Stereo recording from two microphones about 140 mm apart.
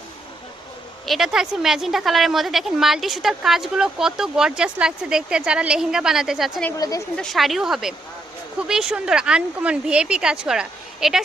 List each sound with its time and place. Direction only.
1.0 s a woman's voice: centre (ahead or behind)
6.7 s a woman's voice: 25° left (ahead or behind)
7.2 s a woman's voice: centre (ahead or behind)